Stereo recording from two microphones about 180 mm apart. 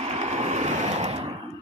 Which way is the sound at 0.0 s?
35° right (ahead or behind).